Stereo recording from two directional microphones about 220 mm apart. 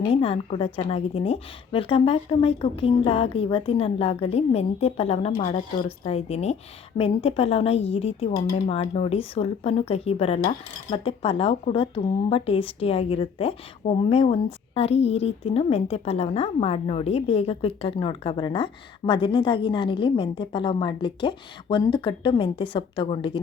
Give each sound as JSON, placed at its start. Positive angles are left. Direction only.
{"t": 0.1, "sound": "a woman's voice", "side_deg": 25}